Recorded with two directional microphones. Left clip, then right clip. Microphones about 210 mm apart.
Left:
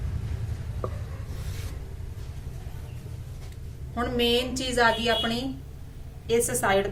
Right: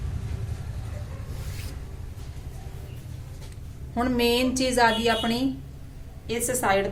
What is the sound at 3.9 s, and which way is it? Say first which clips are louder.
A woman's voice: right 1 dB; 20° right (ahead or behind).